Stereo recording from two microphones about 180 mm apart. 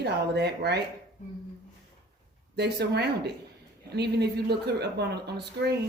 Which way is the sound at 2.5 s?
65° right (ahead or behind).